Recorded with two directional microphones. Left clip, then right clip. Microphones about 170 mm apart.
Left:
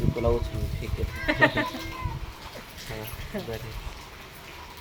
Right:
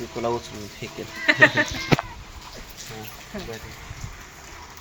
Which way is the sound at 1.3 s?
30° left (ahead or behind).